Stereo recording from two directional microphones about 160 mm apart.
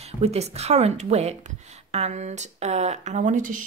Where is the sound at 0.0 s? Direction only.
40° right (ahead or behind).